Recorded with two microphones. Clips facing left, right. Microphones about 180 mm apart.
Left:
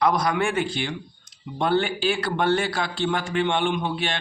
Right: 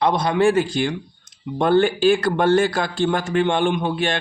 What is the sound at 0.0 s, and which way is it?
A man's voice, 25° right (ahead or behind).